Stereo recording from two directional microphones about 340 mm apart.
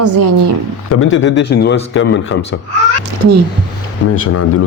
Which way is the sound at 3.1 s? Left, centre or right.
Right.